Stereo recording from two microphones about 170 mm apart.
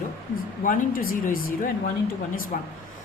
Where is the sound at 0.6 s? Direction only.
50° left (ahead or behind).